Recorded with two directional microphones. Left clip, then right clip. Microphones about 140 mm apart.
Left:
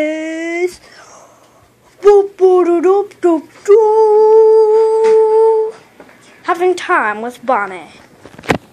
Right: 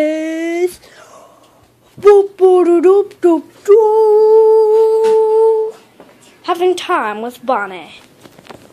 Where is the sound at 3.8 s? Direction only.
20° right (ahead or behind).